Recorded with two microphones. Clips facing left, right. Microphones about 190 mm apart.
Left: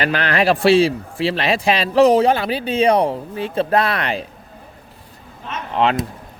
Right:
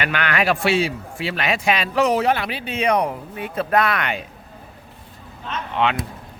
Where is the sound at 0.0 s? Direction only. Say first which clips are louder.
Left 4 dB; 35° left (ahead or behind).